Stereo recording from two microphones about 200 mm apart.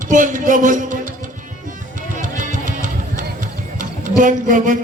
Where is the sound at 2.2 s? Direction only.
40° right (ahead or behind).